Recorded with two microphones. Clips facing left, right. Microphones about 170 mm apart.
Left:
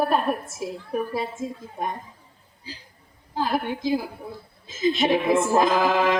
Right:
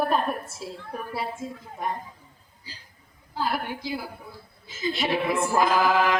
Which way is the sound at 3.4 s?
20° left (ahead or behind).